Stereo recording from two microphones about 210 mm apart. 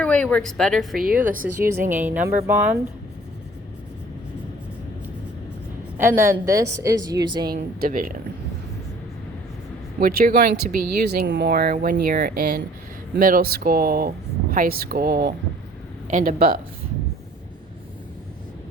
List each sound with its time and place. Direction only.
0.0 s speech: 5° left (ahead or behind)
1.0 s speech: 40° right (ahead or behind)
2.0 s a woman's voice: 10° right (ahead or behind)
6.0 s a woman's voice: 10° right (ahead or behind)
7.5 s speech: 45° right (ahead or behind)
10.0 s speech: 45° right (ahead or behind)